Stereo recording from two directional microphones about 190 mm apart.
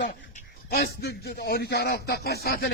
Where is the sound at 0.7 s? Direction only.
55° left (ahead or behind).